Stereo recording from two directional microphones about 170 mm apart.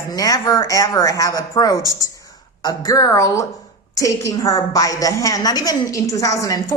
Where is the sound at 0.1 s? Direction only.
20° left (ahead or behind).